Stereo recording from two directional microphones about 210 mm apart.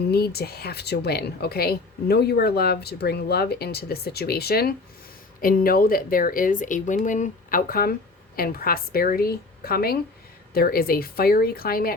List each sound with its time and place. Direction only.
0.1 s speech: 50° left (ahead or behind)